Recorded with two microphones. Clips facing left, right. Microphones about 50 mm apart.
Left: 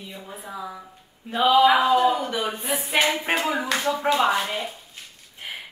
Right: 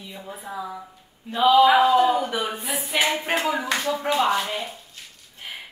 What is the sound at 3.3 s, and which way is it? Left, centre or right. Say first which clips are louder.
A woman's voice: even; centre.